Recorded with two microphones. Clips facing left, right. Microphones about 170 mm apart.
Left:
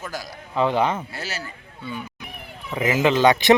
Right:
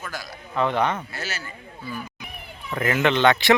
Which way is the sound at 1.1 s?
30° left (ahead or behind).